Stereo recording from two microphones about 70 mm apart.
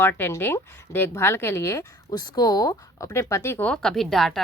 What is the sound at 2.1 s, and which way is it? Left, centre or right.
Speech, left.